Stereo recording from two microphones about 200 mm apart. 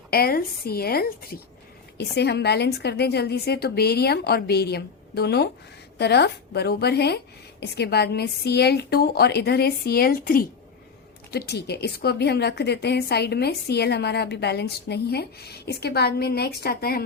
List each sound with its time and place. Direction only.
0.1 s a woman's voice: 50° left (ahead or behind)